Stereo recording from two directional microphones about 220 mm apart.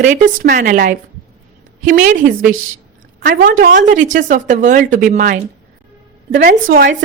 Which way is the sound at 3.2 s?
40° right (ahead or behind).